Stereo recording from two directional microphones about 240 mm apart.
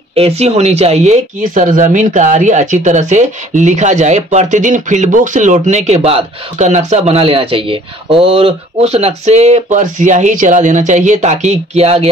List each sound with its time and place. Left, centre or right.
0.1 s speech: right